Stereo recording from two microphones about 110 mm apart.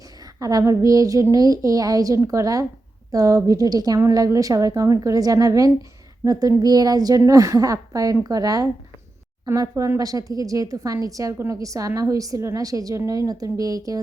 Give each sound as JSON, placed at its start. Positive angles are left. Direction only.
{"t": 0.3, "sound": "a woman's voice", "side_deg": -30}